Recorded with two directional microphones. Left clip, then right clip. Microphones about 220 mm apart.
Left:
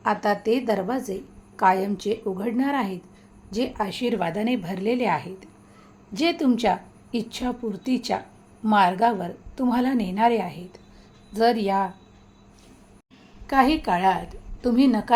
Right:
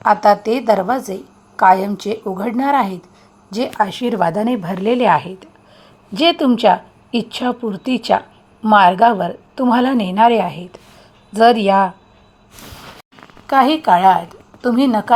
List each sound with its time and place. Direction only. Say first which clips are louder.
0.0 s a woman's voice: right 11 dB; 20° right (ahead or behind)
13.5 s a woman's voice: right 8 dB; 15° right (ahead or behind)